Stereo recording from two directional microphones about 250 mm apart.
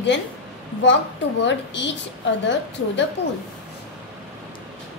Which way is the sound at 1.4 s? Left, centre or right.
Left.